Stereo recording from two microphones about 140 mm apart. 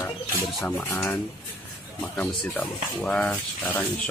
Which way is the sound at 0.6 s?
10° left (ahead or behind).